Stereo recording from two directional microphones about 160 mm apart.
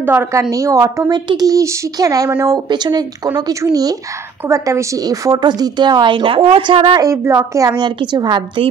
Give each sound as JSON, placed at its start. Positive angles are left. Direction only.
{"t": 0.0, "sound": "a woman's voice", "side_deg": -15}